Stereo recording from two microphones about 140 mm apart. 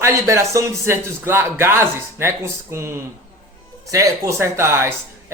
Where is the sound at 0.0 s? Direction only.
20° right (ahead or behind).